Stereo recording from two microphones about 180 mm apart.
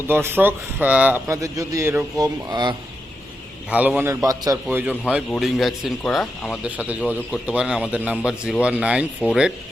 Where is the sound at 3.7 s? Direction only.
10° right (ahead or behind).